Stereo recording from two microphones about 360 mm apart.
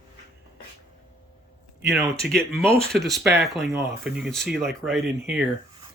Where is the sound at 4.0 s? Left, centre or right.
Centre.